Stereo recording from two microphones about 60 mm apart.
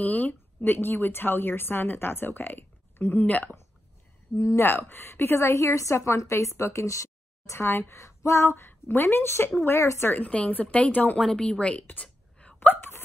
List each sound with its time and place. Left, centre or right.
0.0 s a woman's voice: left
4.6 s a woman's voice: left
8.6 s a woman's voice: left
10.0 s speech: left
11.1 s speech: centre
12.5 s a sound: left